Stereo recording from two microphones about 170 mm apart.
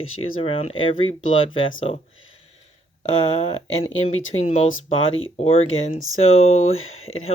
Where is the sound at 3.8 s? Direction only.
35° left (ahead or behind).